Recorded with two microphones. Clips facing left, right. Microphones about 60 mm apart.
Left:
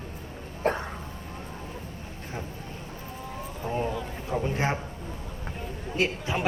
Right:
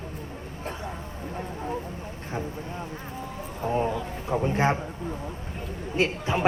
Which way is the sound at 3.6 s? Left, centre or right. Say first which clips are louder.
Right 4 dB; right.